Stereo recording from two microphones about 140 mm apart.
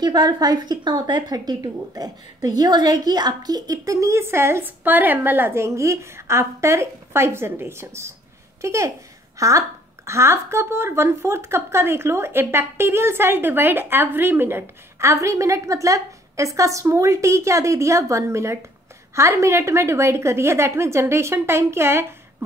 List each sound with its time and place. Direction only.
0.0 s speech: 30° right (ahead or behind)